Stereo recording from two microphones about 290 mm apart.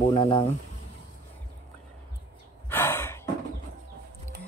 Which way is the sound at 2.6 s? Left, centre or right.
Centre.